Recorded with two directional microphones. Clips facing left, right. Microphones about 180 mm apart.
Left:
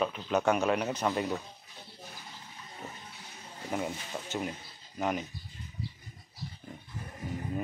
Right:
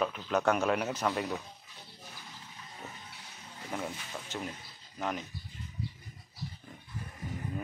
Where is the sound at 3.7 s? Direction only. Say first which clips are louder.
Left 4 dB; 10° left (ahead or behind).